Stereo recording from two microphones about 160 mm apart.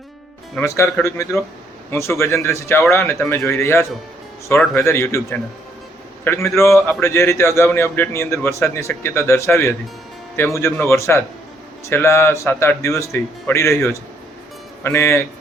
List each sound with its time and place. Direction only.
0.6 s speech: 15° left (ahead or behind)
6.2 s speech: 15° left (ahead or behind)